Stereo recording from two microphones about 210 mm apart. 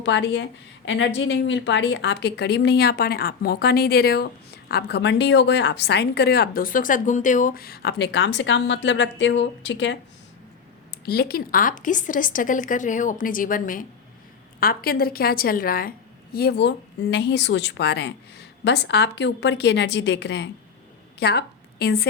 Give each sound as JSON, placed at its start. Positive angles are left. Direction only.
{"t": 0.0, "sound": "a woman's voice", "side_deg": 55}
{"t": 11.0, "sound": "a woman's voice", "side_deg": 50}